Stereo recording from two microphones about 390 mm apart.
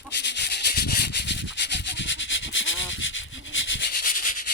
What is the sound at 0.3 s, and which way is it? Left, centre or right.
Rub, left.